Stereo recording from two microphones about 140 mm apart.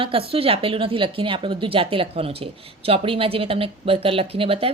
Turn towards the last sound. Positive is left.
turn(degrees=-40)  # may be behind; listen again after turning